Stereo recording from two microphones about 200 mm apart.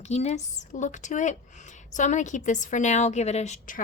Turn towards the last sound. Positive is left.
turn(degrees=40)  # may be behind; listen again after turning